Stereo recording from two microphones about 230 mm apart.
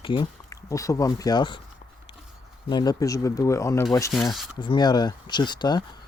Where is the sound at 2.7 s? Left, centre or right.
Centre.